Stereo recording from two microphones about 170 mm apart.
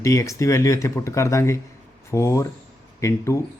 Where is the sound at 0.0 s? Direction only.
20° left (ahead or behind).